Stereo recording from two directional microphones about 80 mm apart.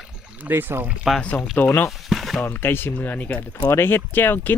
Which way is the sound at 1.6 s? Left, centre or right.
Left.